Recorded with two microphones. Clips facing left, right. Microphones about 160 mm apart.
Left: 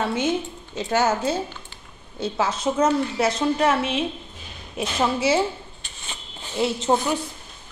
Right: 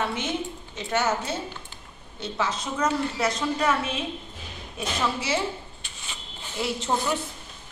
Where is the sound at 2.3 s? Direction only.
25° left (ahead or behind).